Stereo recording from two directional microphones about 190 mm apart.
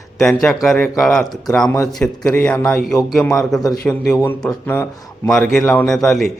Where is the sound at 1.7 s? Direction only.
15° left (ahead or behind).